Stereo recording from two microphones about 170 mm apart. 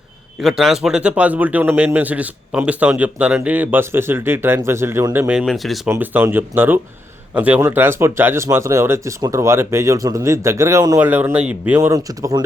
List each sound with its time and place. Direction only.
0.4 s speech: centre (ahead or behind)
5.9 s speech: 15° right (ahead or behind)